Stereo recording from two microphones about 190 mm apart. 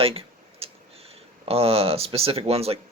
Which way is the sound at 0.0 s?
30° right (ahead or behind).